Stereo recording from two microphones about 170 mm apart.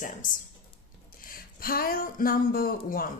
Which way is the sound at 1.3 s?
60° left (ahead or behind).